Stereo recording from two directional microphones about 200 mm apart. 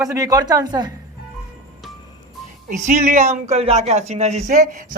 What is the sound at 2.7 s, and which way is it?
Speech, 35° right (ahead or behind).